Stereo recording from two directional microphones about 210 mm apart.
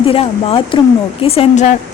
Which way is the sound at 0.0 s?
25° left (ahead or behind).